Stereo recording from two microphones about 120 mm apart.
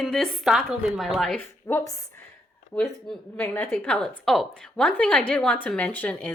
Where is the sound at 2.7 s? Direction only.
10° left (ahead or behind).